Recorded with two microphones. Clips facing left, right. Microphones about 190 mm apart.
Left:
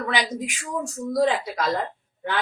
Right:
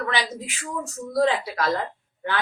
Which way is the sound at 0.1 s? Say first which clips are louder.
Left 2 dB; 15° left (ahead or behind).